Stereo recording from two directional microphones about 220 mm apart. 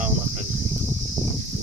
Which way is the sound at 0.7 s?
Centre (ahead or behind).